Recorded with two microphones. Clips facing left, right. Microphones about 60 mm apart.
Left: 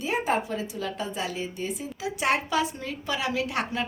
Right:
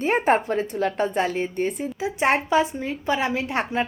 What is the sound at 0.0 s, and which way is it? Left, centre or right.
A woman's voice, right.